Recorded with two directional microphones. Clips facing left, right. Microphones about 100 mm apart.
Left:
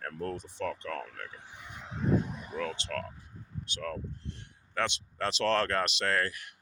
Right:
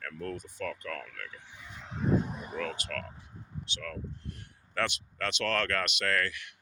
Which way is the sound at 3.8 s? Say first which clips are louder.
Left 5 dB; 30° left (ahead or behind).